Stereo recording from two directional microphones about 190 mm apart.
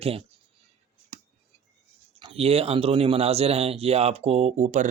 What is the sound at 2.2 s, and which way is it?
Speech, 30° right (ahead or behind).